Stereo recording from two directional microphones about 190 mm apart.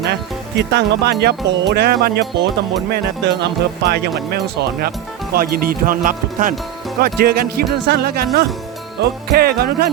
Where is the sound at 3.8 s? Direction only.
60° right (ahead or behind).